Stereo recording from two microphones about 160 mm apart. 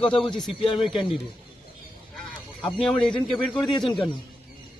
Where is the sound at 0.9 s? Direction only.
Centre (ahead or behind).